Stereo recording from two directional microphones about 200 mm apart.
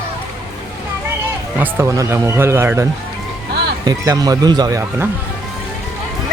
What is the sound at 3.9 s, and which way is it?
Speech, 20° right (ahead or behind).